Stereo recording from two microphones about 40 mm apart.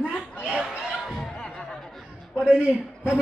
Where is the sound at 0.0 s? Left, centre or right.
Right.